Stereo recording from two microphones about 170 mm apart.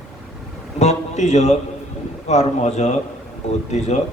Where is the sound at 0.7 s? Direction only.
40° left (ahead or behind).